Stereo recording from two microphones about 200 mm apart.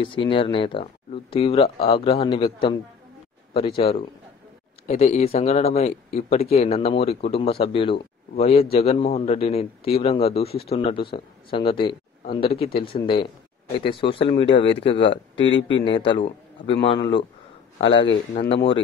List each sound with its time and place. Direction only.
0.0 s a man's voice: 25° left (ahead or behind)
10.5 s speech: 50° left (ahead or behind)
10.8 s speech: 25° left (ahead or behind)